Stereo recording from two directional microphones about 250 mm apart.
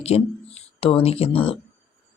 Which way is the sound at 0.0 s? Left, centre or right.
Left.